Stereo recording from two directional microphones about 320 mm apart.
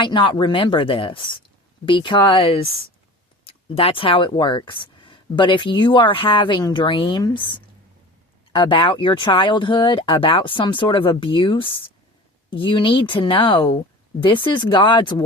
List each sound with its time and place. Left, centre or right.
0.0 s speech: centre